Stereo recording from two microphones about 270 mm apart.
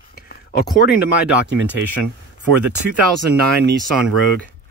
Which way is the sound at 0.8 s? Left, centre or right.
Left.